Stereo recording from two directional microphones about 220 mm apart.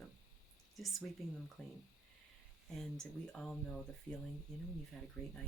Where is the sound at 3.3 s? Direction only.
5° left (ahead or behind).